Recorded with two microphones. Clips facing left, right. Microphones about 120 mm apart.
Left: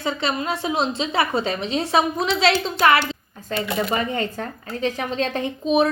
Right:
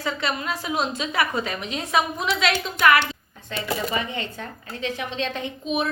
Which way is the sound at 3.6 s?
45° left (ahead or behind).